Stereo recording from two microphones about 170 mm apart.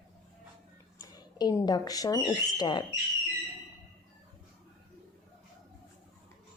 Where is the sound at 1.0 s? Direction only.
25° left (ahead or behind).